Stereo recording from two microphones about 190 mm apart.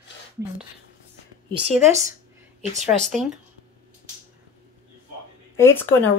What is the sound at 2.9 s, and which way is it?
Speech, 5° left (ahead or behind).